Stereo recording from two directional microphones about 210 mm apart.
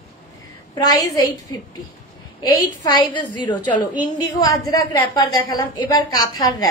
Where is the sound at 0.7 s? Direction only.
15° left (ahead or behind).